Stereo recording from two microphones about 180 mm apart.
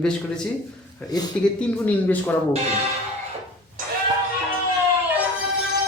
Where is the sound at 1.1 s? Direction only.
20° left (ahead or behind).